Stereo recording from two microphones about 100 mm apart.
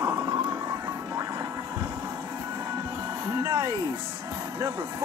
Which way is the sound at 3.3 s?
30° right (ahead or behind).